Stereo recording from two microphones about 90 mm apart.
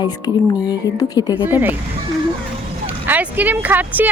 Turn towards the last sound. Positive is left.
turn(degrees=-20)  # may be behind; listen again after turning